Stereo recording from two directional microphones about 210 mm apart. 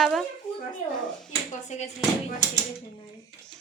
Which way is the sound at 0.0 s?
Centre (ahead or behind).